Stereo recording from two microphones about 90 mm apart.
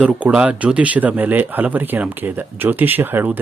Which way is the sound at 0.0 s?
10° right (ahead or behind).